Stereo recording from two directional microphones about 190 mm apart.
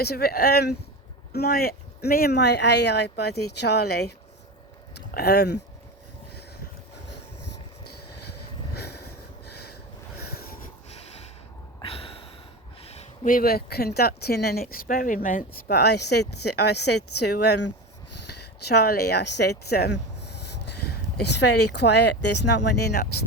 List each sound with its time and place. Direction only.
0.0 s speech: 55° left (ahead or behind)
8.7 s a sound: 60° left (ahead or behind)
10.8 s snort: 35° left (ahead or behind)
11.8 s a sound: 30° left (ahead or behind)
12.8 s speech: 35° left (ahead or behind); by 16.2 s 60° left (ahead or behind)
17.2 s speech: 60° left (ahead or behind)